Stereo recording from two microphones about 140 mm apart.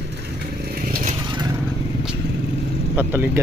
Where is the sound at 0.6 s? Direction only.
90° right.